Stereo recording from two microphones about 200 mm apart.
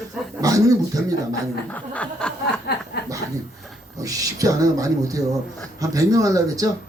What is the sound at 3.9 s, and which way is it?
Speech, 15° right (ahead or behind).